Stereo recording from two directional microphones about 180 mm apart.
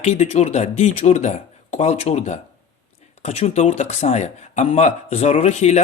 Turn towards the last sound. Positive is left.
turn(degrees=40)  # may be behind; listen again after turning